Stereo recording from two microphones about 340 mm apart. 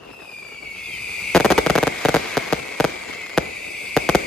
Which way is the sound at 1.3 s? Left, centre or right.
Centre.